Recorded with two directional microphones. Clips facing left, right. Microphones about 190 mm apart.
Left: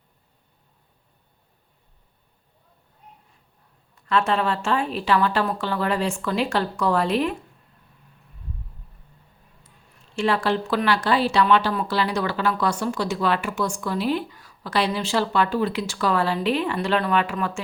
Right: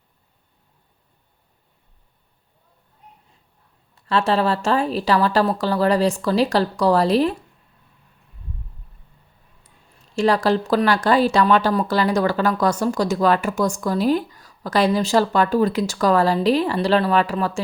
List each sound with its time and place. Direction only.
3.9 s speech: 30° right (ahead or behind)
10.2 s speech: 40° right (ahead or behind)